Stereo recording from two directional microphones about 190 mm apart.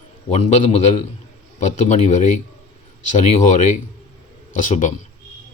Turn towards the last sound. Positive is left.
turn(degrees=40)  # may be behind; listen again after turning